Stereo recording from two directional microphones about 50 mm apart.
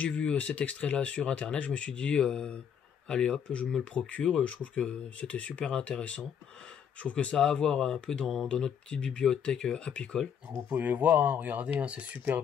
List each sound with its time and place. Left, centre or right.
0.0 s speech: left
7.3 s speech: centre
10.7 s speech: right